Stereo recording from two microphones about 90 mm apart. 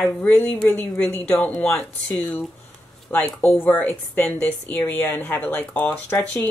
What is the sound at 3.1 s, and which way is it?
A woman's voice, 20° left (ahead or behind).